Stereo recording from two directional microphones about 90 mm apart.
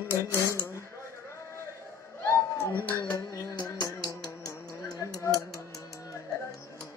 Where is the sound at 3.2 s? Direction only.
45° left (ahead or behind).